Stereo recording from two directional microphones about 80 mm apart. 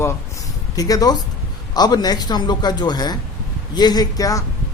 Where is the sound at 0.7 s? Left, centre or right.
Left.